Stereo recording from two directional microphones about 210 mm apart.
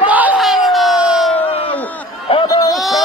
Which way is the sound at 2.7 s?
Centre (ahead or behind).